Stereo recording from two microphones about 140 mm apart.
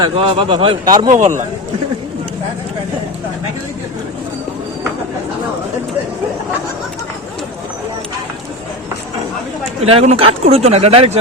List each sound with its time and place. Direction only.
0.0 s a man's voice: 40° right (ahead or behind)
1.1 s a man's voice: 60° right (ahead or behind)
9.8 s speech: 45° right (ahead or behind)